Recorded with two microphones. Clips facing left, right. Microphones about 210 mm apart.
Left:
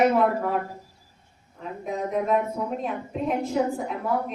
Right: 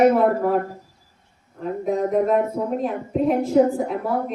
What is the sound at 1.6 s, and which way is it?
Speech, 45° right (ahead or behind).